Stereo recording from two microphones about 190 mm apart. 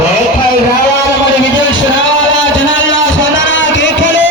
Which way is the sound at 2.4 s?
85° left.